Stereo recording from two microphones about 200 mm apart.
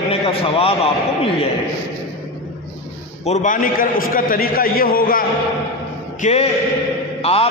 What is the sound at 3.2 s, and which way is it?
A man's voice, 40° left (ahead or behind).